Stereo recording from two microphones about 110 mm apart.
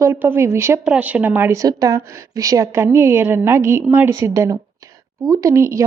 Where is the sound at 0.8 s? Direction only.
10° right (ahead or behind).